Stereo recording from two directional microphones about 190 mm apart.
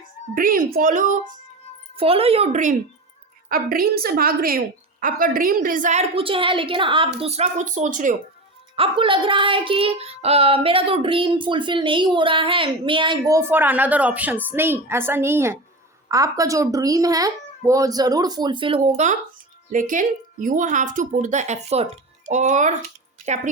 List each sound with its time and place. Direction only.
0.3 s a woman's voice: 50° right (ahead or behind)
2.0 s a woman's voice: 30° right (ahead or behind)
3.5 s a woman's voice: 50° right (ahead or behind)
8.7 s child singing: 30° right (ahead or behind)
19.7 s a woman's voice: 45° right (ahead or behind)